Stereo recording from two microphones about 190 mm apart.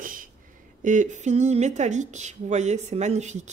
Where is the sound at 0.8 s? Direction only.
40° right (ahead or behind).